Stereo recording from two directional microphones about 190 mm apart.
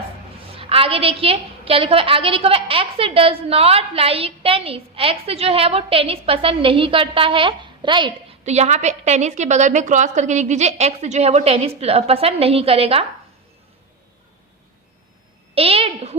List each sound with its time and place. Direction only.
0.5 s a woman's voice: 30° right (ahead or behind)
15.5 s a woman's voice: 30° right (ahead or behind)